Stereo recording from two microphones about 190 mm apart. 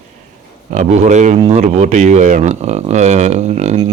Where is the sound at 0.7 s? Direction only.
40° right (ahead or behind).